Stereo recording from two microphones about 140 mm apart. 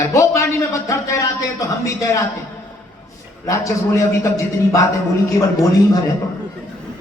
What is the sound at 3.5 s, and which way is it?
A man's voice, 20° left (ahead or behind).